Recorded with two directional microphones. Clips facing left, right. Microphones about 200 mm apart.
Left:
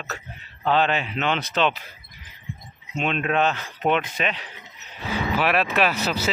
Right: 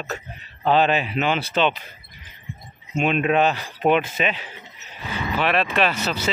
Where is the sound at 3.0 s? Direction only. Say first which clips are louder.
Right 4 dB; 10° right (ahead or behind).